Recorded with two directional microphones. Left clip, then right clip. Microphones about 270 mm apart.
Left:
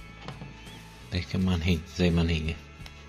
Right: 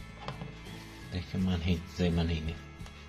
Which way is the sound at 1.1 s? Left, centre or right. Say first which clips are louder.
Left 5 dB; left.